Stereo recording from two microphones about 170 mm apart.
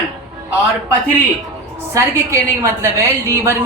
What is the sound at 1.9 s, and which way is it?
A woman's voice, 15° right (ahead or behind).